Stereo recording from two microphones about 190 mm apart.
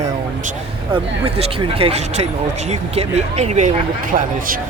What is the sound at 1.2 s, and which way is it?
Speech, 30° right (ahead or behind).